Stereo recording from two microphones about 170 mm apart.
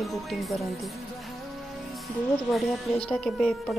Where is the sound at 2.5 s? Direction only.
5° left (ahead or behind).